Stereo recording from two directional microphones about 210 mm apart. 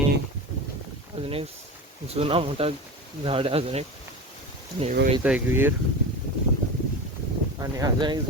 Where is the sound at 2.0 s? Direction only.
30° right (ahead or behind).